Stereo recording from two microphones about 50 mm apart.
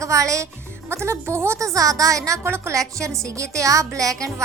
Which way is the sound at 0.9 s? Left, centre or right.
Right.